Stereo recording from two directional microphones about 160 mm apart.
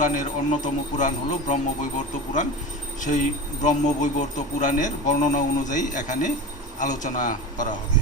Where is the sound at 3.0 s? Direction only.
50° left (ahead or behind).